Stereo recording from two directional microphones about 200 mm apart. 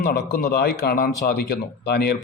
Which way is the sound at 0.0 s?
50° left (ahead or behind).